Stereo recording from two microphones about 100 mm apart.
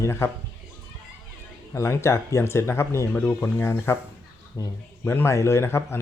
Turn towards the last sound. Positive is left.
turn(degrees=25)  # may be behind; listen again after turning